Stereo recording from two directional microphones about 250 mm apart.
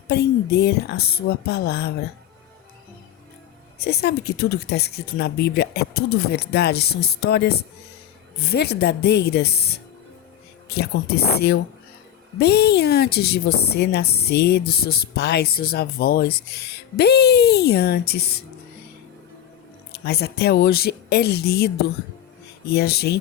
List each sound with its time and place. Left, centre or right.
0.1 s speech: left
3.8 s speech: left
19.9 s speech: left
22.7 s speech: left